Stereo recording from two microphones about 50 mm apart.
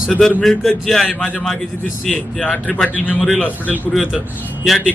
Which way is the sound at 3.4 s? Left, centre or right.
Left.